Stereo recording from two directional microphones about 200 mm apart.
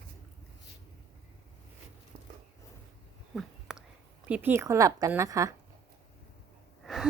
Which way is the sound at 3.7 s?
5° right (ahead or behind).